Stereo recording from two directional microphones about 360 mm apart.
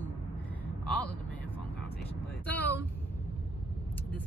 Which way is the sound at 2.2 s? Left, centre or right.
Centre.